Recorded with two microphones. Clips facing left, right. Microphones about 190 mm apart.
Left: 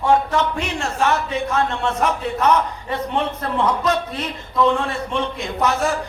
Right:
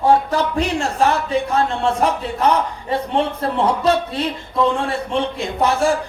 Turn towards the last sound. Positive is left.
turn(degrees=-30)  # may be behind; listen again after turning